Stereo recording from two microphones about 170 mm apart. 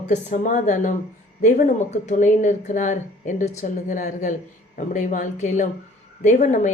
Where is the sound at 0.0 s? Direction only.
45° left (ahead or behind).